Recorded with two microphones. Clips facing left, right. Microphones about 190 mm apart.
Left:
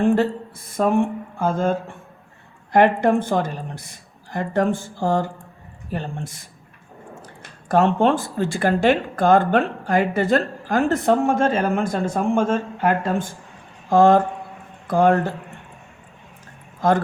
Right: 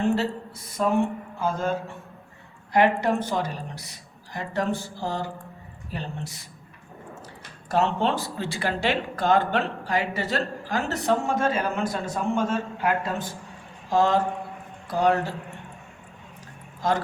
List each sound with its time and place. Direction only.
0.0 s speech: 50° left (ahead or behind)
7.7 s a man's voice: 50° left (ahead or behind)
16.8 s speech: 55° left (ahead or behind)